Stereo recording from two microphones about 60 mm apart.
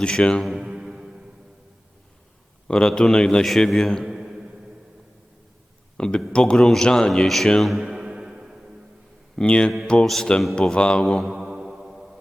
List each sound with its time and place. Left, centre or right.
0.0 s a man's voice: centre
0.4 s music: centre
2.6 s a man's voice: centre
4.0 s a sound: centre
6.0 s a man's voice: centre
7.6 s a sound: centre
9.3 s a man's voice: centre
11.3 s music: centre